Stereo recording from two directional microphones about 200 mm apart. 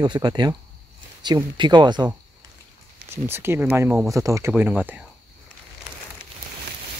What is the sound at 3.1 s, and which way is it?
Speech, 10° right (ahead or behind).